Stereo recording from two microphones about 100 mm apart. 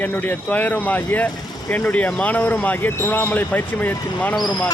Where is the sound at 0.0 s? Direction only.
15° left (ahead or behind).